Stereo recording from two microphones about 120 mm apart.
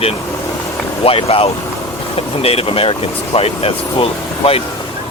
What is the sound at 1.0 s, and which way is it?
Speech, 55° left (ahead or behind).